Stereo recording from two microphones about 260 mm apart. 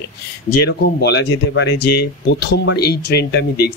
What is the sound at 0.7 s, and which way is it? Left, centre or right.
Speech, left.